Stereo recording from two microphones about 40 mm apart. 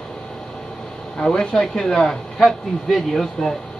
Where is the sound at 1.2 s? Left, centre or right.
Left.